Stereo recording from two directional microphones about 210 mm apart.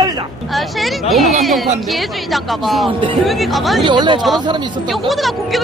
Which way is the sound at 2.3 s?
Centre (ahead or behind).